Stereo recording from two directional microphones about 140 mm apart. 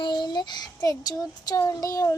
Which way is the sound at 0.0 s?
30° left (ahead or behind).